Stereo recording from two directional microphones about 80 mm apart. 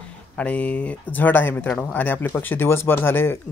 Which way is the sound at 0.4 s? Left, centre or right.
Centre.